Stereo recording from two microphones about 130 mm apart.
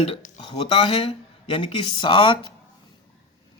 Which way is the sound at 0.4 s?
40° left (ahead or behind).